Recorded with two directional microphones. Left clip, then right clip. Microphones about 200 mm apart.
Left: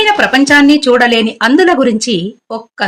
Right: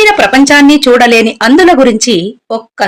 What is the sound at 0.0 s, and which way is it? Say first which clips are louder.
Speech: right 4 dB; 35° right (ahead or behind).